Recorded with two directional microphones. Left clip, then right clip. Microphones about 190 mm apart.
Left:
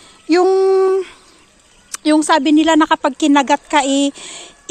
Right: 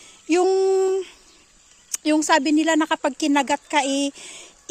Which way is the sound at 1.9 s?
20° right (ahead or behind).